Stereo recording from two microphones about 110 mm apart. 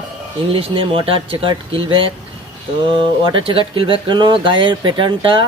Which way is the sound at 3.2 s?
55° right (ahead or behind).